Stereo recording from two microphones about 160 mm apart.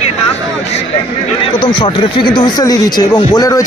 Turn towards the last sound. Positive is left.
turn(degrees=25)  # may be behind; listen again after turning